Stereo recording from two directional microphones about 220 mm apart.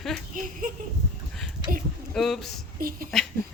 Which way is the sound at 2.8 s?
40° right (ahead or behind).